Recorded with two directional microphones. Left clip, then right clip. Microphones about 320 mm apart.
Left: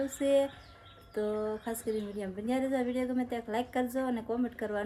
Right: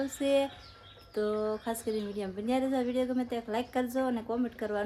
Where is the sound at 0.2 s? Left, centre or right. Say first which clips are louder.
Left 1 dB; centre.